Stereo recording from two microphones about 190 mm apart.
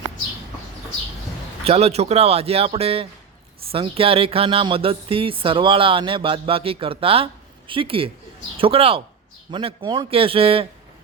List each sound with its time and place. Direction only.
1.6 s speech: 35° right (ahead or behind)